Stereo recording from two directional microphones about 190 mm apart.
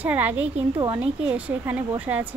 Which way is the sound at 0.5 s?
25° right (ahead or behind).